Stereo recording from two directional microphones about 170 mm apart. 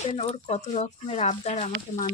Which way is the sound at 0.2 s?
40° left (ahead or behind).